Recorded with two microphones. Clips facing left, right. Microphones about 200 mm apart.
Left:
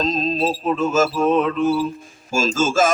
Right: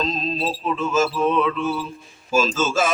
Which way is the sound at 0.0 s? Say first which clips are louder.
Left 4 dB; 40° left (ahead or behind).